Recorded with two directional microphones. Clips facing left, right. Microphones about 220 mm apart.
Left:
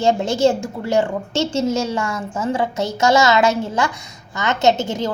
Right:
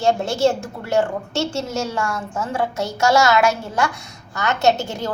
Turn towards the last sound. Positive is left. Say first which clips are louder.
# left 2 dB
turn(degrees=20)  # may be behind; listen again after turning